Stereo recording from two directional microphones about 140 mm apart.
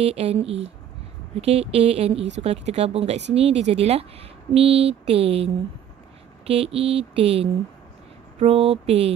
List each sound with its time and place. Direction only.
0.0 s speech: 45° right (ahead or behind)